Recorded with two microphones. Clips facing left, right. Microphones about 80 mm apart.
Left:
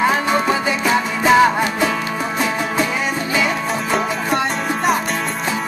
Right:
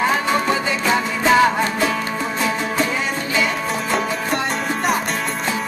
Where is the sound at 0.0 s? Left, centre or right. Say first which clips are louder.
Left 2 dB; centre.